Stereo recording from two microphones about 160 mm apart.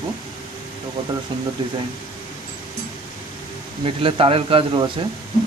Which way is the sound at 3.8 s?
35° right (ahead or behind).